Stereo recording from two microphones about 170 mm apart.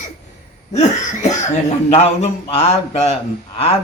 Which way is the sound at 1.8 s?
40° left (ahead or behind).